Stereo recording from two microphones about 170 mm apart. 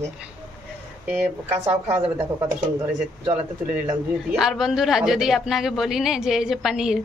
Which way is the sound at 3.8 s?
Centre (ahead or behind).